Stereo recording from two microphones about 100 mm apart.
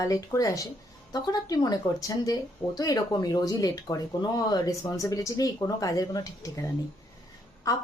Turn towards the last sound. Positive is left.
turn(degrees=35)  # may be behind; listen again after turning